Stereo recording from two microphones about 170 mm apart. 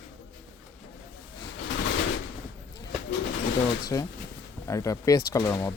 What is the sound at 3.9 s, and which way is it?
Speech, 20° left (ahead or behind).